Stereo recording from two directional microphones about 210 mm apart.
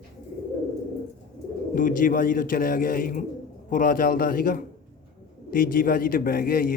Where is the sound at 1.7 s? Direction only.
40° left (ahead or behind).